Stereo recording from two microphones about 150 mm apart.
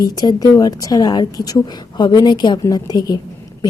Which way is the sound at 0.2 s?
25° left (ahead or behind).